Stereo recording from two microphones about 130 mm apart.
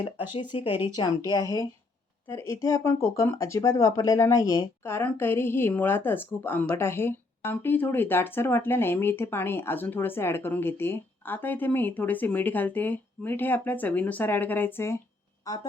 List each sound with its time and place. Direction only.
0.5 s speech: 40° left (ahead or behind)
1.3 s speech: 25° left (ahead or behind)